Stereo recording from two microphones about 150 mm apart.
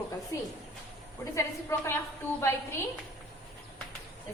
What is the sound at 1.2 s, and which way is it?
A woman's voice, 20° left (ahead or behind).